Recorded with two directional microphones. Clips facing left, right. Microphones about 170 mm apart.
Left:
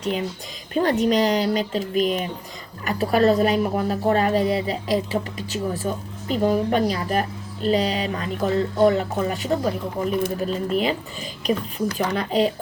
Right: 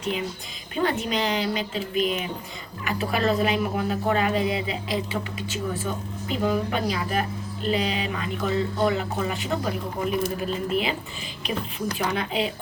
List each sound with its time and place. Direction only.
0.0 s speech: 40° left (ahead or behind)